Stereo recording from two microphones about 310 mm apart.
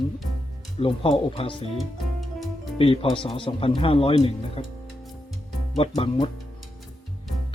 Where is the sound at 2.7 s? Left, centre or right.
Centre.